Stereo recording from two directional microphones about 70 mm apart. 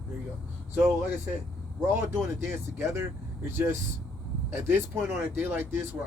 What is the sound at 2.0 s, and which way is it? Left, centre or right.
Speech, right.